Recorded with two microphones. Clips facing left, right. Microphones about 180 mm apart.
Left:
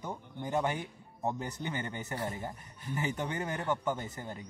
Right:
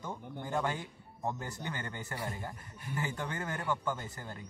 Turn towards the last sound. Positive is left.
turn(degrees=20)  # may be behind; listen again after turning